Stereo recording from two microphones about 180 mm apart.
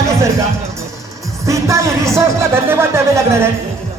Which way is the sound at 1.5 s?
15° right (ahead or behind).